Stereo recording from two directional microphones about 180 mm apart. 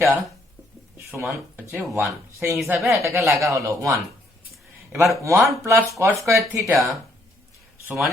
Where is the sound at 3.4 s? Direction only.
15° right (ahead or behind).